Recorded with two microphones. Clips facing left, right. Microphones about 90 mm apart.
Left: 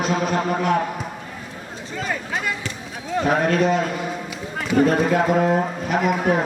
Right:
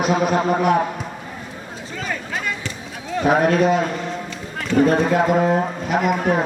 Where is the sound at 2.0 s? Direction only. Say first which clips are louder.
Left 1 dB; centre (ahead or behind).